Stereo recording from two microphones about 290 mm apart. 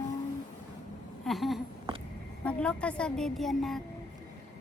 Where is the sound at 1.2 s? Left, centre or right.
Centre.